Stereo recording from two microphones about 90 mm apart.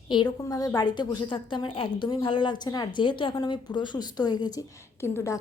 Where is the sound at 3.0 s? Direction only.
65° left (ahead or behind); by 4.6 s 45° left (ahead or behind).